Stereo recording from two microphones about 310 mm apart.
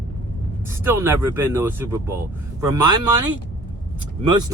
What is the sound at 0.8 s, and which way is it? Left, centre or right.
Speech, centre.